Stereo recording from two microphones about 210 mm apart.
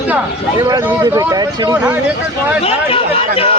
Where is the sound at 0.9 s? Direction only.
15° right (ahead or behind).